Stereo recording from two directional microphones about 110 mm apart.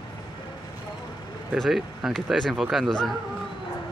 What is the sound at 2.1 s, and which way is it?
Speech, centre (ahead or behind).